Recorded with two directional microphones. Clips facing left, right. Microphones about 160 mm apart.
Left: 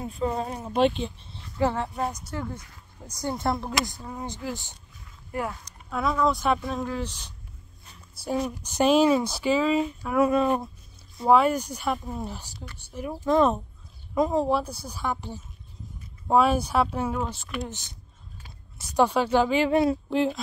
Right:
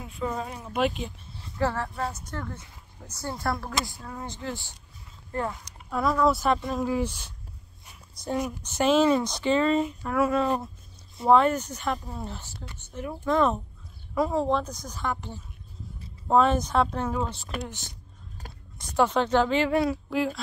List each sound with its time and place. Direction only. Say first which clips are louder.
0.0 s speech: left 3 dB; 35° left (ahead or behind)
1.6 s speech: left 2 dB; 20° left (ahead or behind)
5.5 s speech: right 1 dB; centre (ahead or behind)
6.9 s speech: right 4 dB; 10° right (ahead or behind)
8.5 s speech: left 2 dB; 15° left (ahead or behind)
10.1 s speech: left 3 dB; 20° left (ahead or behind)
18.8 s speech: left 1 dB; 10° left (ahead or behind)